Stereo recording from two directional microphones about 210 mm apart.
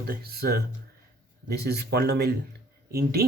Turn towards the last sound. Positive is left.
turn(degrees=-50)  # may be behind; listen again after turning